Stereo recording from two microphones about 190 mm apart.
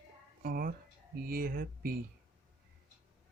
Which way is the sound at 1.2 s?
50° right (ahead or behind).